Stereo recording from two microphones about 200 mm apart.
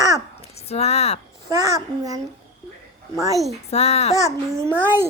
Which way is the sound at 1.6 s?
20° right (ahead or behind).